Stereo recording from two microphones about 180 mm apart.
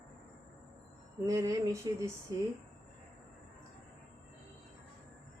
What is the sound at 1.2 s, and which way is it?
Speech, 20° right (ahead or behind).